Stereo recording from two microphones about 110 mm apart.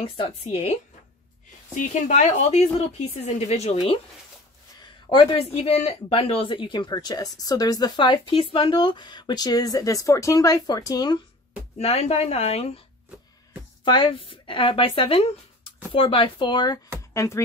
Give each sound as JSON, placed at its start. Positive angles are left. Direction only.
{"t": 0.5, "sound": "speech", "side_deg": 90}
{"t": 2.0, "sound": "speech", "side_deg": 85}
{"t": 5.1, "sound": "speech", "side_deg": 55}
{"t": 5.5, "sound": "speech", "side_deg": 70}
{"t": 11.8, "sound": "speech", "side_deg": 75}
{"t": 13.8, "sound": "speech", "side_deg": 50}
{"t": 17.1, "sound": "speech", "side_deg": 25}